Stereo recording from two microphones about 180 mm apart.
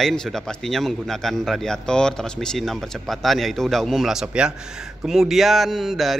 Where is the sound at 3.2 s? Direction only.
Centre (ahead or behind).